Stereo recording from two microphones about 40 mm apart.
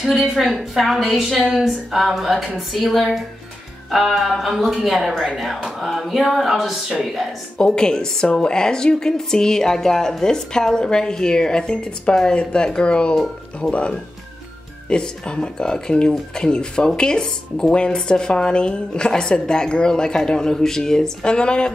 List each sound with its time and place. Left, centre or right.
0.0 s a woman's voice: centre
7.5 s speech: left